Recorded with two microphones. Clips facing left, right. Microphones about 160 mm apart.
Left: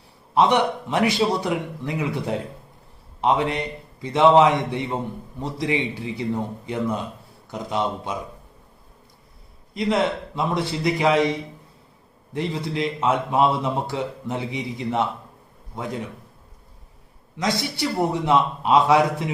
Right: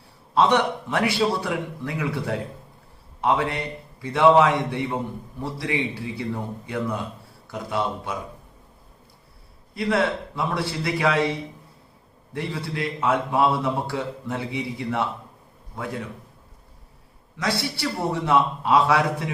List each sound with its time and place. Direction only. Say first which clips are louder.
0.3 s a man's voice: left 1 dB; 15° left (ahead or behind)
9.7 s a man's voice: left 1 dB; 20° left (ahead or behind)
17.3 s a man's voice: left 2 dB; 20° left (ahead or behind)